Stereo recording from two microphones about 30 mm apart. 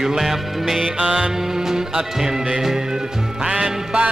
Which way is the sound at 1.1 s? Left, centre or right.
Right.